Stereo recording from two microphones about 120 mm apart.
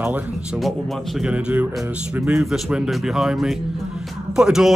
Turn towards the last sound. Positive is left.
turn(degrees=-5)  # may be behind; listen again after turning